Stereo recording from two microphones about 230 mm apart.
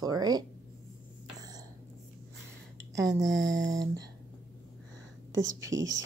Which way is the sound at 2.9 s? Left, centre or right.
Centre.